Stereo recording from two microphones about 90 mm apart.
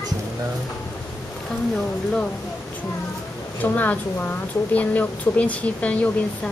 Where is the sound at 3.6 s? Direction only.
20° left (ahead or behind).